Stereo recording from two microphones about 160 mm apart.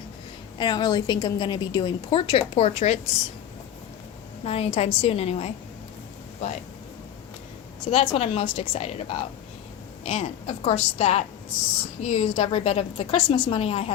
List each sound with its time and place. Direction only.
0.6 s a woman's voice: 25° left (ahead or behind); by 3.0 s 40° left (ahead or behind)
4.4 s a woman's voice: 40° left (ahead or behind)
7.9 s a woman's voice: 40° left (ahead or behind)